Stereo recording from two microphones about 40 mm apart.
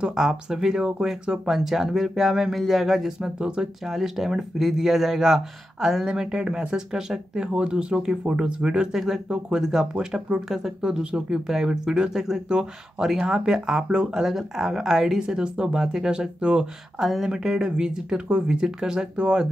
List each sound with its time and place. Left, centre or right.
0.0 s speech: centre
1.4 s speech: centre
3.2 s speech: right
3.8 s speech: centre; by 8.8 s right
8.9 s speech: centre
13.8 s speech: right
14.2 s speech: centre
17.0 s speech: centre